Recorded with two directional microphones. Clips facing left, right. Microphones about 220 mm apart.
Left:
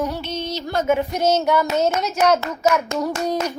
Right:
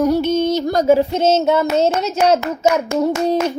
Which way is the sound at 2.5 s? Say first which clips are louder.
Right 3 dB; 30° right (ahead or behind).